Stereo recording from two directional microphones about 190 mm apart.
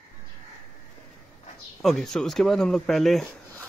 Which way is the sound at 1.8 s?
Centre (ahead or behind).